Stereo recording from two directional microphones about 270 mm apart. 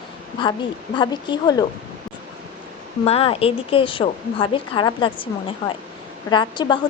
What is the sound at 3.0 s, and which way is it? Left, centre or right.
A woman's voice, left.